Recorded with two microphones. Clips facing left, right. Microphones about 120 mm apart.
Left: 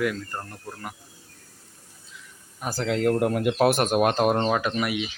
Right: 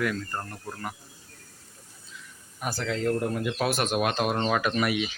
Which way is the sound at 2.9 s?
65° left (ahead or behind).